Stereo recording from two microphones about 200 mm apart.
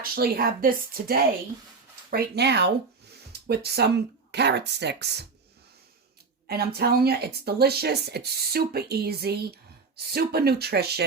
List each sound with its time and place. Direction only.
0.0 s speech: 50° right (ahead or behind)
6.5 s speech: 50° right (ahead or behind)